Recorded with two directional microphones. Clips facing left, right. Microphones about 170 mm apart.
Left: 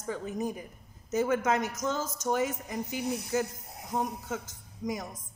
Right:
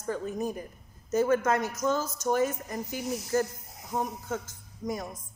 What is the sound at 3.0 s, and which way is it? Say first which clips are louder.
Speech: right 2 dB; 60° left (ahead or behind).